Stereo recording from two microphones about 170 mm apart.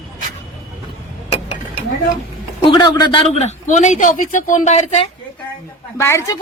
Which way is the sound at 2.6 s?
25° left (ahead or behind).